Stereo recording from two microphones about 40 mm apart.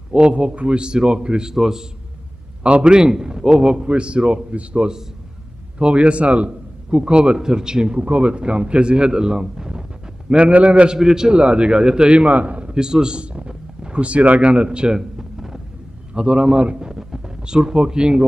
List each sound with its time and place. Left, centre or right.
0.1 s a man's voice: right
1.5 s a man's voice: centre
2.6 s a man's voice: right
8.0 s a man's voice: right
10.3 s a man's voice: right
11.0 s a man's voice: centre
12.4 s a sound: right
12.7 s speech: centre
15.0 s a sound: centre
16.1 s a man's voice: right
16.9 s a sound: centre